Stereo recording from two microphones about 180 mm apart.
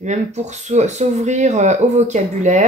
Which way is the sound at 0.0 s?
40° right (ahead or behind).